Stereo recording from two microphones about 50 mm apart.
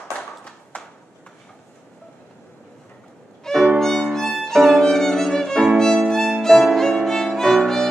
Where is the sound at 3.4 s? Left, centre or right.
Centre.